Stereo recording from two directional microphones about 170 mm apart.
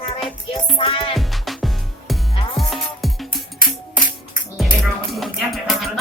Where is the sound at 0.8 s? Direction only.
30° left (ahead or behind).